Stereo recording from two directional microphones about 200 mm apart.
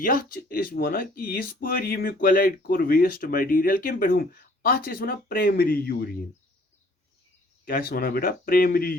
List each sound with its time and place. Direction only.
0.0 s speech: 45° left (ahead or behind)
7.6 s speech: 45° left (ahead or behind)